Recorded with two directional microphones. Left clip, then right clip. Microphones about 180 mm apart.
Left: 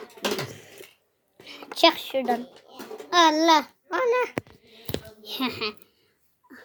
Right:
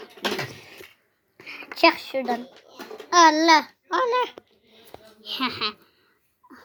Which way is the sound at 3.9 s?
30° left (ahead or behind).